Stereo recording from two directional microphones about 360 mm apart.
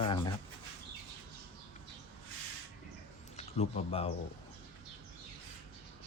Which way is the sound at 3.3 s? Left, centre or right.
Centre.